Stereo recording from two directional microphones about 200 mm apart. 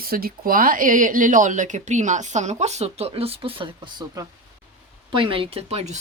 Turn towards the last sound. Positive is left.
turn(degrees=-30)  # may be behind; listen again after turning